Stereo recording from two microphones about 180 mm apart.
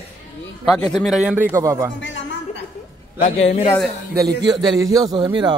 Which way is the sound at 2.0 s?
90° left.